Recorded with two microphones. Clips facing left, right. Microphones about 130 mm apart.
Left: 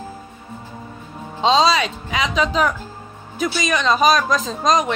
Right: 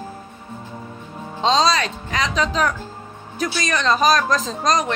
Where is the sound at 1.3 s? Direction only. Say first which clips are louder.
Left 2 dB; 5° left (ahead or behind).